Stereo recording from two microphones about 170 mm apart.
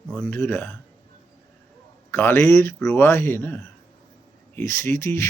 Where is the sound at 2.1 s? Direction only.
15° left (ahead or behind).